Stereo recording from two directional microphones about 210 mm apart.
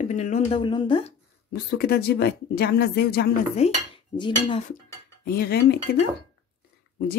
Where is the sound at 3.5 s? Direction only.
30° left (ahead or behind).